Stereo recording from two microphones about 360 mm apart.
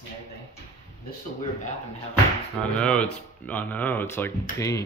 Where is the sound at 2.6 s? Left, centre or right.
Centre.